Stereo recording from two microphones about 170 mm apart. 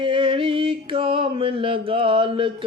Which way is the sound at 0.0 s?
30° right (ahead or behind).